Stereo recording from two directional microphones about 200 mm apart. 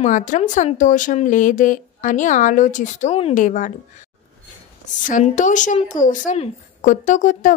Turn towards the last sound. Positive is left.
turn(degrees=40)  # may be behind; listen again after turning